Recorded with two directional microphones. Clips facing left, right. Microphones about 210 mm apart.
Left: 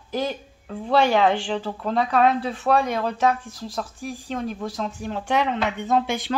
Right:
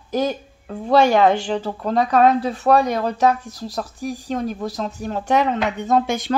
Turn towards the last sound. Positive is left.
turn(degrees=-45)  # may be behind; listen again after turning